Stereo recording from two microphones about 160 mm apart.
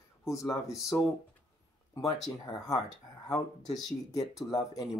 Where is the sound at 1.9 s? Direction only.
20° left (ahead or behind).